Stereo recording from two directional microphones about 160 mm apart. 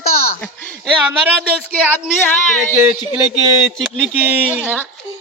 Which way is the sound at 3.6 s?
Centre (ahead or behind).